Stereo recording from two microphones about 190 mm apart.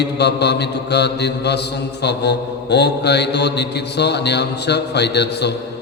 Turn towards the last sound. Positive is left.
turn(degrees=60)  # may be behind; listen again after turning